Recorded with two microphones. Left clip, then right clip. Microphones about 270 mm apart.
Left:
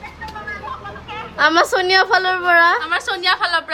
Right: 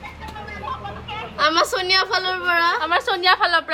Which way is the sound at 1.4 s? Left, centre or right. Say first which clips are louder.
Left 4 dB; left.